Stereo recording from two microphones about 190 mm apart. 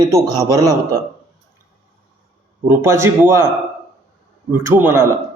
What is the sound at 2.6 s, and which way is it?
Speech, 10° right (ahead or behind).